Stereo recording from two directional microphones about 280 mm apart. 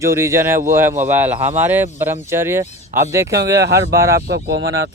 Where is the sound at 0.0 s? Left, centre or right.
Centre.